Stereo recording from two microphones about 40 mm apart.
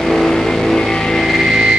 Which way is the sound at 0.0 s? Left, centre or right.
Centre.